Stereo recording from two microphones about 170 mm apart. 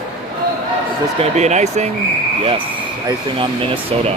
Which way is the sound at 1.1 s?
40° right (ahead or behind).